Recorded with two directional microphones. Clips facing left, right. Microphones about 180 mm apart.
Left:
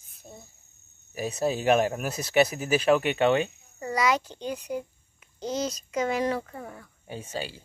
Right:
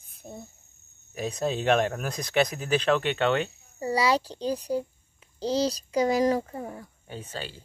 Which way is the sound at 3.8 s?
30° right (ahead or behind).